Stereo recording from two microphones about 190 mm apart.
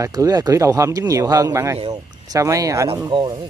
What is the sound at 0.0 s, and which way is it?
Speech, 20° right (ahead or behind).